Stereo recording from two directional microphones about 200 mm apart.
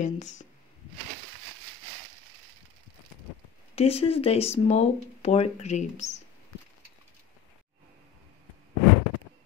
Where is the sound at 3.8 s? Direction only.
30° left (ahead or behind).